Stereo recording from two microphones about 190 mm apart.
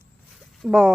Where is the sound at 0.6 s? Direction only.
5° right (ahead or behind).